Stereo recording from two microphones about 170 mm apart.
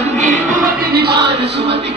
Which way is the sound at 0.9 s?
70° right (ahead or behind).